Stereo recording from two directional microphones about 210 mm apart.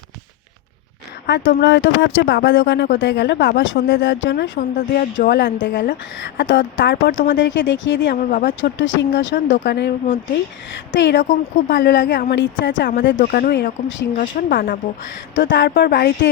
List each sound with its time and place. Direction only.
1.3 s speech: 55° left (ahead or behind)
5.2 s speech: 45° left (ahead or behind)
8.2 s a woman's voice: 40° left (ahead or behind)
8.4 s speech: 60° left (ahead or behind)
10.9 s speech: 60° left (ahead or behind)
11.2 s a woman's voice: 40° left (ahead or behind)
11.8 s speech: 55° left (ahead or behind)
14.2 s a woman's voice: 40° left (ahead or behind)
15.4 s speech: 60° left (ahead or behind)